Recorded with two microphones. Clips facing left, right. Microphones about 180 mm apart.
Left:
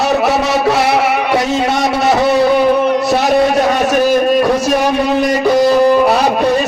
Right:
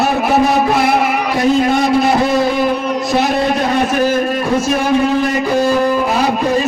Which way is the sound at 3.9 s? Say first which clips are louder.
Left 4 dB; 75° left (ahead or behind).